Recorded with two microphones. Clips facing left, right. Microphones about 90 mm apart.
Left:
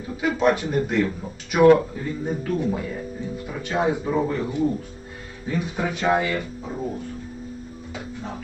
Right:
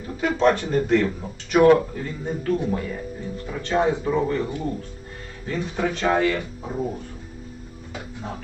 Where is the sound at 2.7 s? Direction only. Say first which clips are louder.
Even; 10° left (ahead or behind).